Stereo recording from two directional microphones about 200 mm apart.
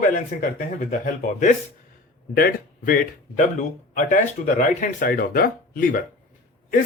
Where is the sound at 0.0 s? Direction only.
40° left (ahead or behind).